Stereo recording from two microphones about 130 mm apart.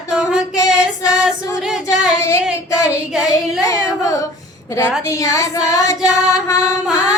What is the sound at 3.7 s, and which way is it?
Female singing, 25° left (ahead or behind).